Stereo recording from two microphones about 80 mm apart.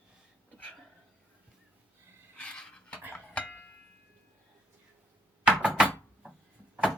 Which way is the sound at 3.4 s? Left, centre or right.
Centre.